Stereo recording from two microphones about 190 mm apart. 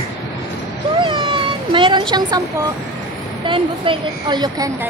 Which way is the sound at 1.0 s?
25° right (ahead or behind).